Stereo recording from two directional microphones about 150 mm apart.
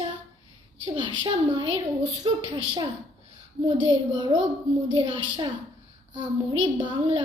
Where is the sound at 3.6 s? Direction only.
30° right (ahead or behind).